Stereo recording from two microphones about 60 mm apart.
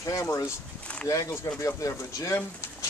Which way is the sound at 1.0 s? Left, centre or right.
Left.